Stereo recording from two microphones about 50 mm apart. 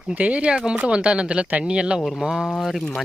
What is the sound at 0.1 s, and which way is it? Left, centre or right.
Speech, right.